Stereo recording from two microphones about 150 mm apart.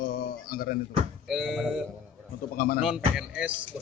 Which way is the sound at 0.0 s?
75° left (ahead or behind).